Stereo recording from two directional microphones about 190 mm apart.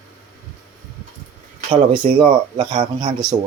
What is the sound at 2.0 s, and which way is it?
Speech, 35° right (ahead or behind).